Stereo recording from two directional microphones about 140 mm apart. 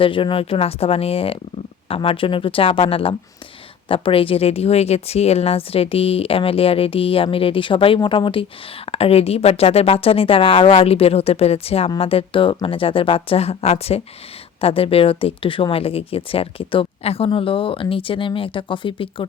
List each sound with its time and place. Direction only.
0.0 s speech: 40° left (ahead or behind)